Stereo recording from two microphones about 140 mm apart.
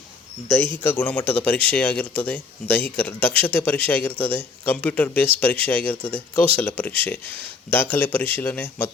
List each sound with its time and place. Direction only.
0.8 s speech: 15° left (ahead or behind)